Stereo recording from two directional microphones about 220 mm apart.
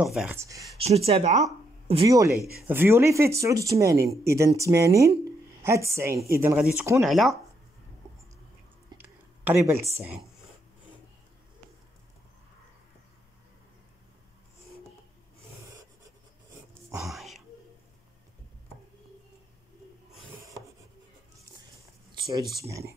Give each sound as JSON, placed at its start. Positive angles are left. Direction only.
{"t": 0.0, "sound": "speech", "side_deg": -5}
{"t": 0.7, "sound": "speech", "side_deg": -25}
{"t": 9.5, "sound": "speech", "side_deg": -10}
{"t": 17.0, "sound": "whispering", "side_deg": 0}
{"t": 22.1, "sound": "a sound", "side_deg": -20}
{"t": 22.7, "sound": "speech", "side_deg": -15}